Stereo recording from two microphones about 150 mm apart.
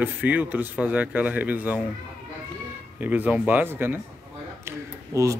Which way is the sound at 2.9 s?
10° right (ahead or behind).